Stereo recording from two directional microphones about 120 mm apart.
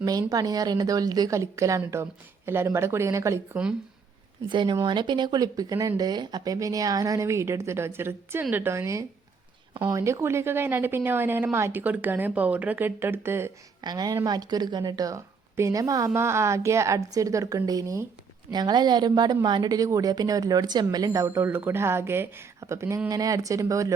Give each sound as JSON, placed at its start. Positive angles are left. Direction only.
{"t": 0.0, "sound": "a woman's voice", "side_deg": -30}
{"t": 4.4, "sound": "a woman's voice", "side_deg": -40}
{"t": 13.8, "sound": "a woman's voice", "side_deg": -35}